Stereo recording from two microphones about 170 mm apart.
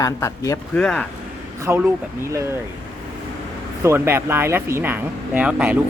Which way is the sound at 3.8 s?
15° right (ahead or behind).